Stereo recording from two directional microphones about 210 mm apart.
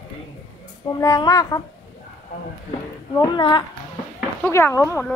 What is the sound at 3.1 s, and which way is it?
A woman's voice, 20° left (ahead or behind).